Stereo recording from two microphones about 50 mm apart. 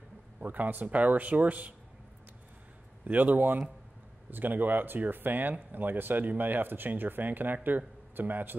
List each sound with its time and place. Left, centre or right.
0.4 s speech: right
3.1 s speech: right